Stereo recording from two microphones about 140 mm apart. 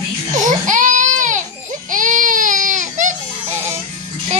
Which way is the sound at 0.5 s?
65° right (ahead or behind).